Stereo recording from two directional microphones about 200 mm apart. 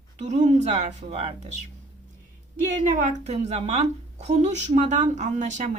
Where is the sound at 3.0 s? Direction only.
35° right (ahead or behind).